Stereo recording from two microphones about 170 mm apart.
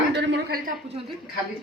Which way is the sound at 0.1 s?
80° right.